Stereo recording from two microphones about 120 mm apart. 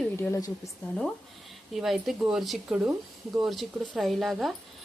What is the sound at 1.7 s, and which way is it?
A woman's voice, centre (ahead or behind).